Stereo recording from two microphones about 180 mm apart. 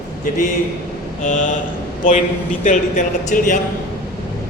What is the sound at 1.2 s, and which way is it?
Speech, 45° left (ahead or behind).